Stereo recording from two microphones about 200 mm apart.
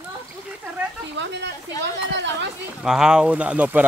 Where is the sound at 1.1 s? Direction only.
60° right (ahead or behind).